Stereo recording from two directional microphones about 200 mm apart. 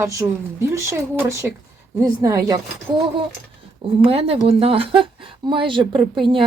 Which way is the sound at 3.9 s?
25° right (ahead or behind).